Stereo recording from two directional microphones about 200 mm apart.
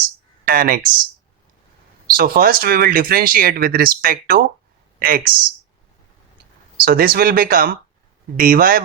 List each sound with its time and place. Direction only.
0.4 s speech: 45° right (ahead or behind)
2.0 s speech: 45° right (ahead or behind)
6.8 s speech: 45° right (ahead or behind)